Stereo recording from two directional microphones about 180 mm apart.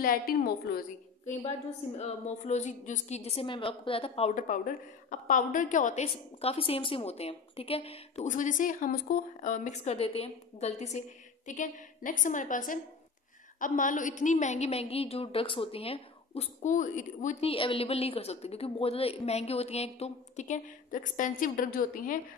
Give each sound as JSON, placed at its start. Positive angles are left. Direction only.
{"t": 0.0, "sound": "a woman's voice", "side_deg": 55}
{"t": 2.0, "sound": "a woman's voice", "side_deg": 40}
{"t": 4.4, "sound": "a woman's voice", "side_deg": 45}
{"t": 6.0, "sound": "a woman's voice", "side_deg": 30}
{"t": 17.5, "sound": "a woman's voice", "side_deg": 30}